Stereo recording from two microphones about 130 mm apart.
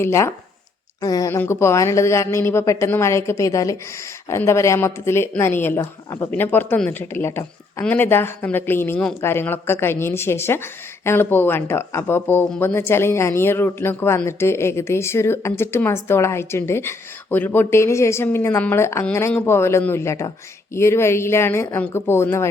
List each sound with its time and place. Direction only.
0.0 s speech: 20° left (ahead or behind)